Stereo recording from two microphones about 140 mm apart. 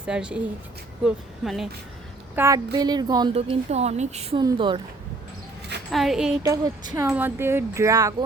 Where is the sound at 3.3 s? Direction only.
45° right (ahead or behind).